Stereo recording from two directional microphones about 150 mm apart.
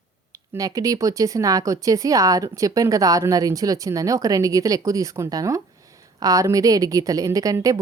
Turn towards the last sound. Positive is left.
turn(degrees=-25)  # may be behind; listen again after turning